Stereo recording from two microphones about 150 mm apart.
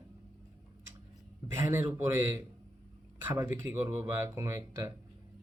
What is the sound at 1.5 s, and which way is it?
Speech, 15° right (ahead or behind).